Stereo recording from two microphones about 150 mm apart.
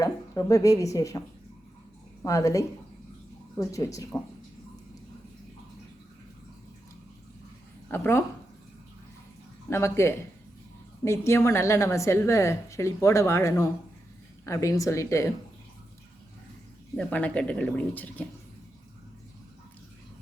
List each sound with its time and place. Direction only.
0.0 s a woman's voice: 20° left (ahead or behind)
2.2 s a woman's voice: 20° left (ahead or behind)
7.9 s speech: 15° left (ahead or behind)
9.6 s a woman's voice: 15° left (ahead or behind)
17.0 s speech: 10° left (ahead or behind)